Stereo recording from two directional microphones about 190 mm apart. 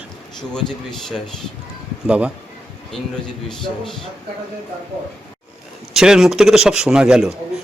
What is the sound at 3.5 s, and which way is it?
Speech, centre (ahead or behind).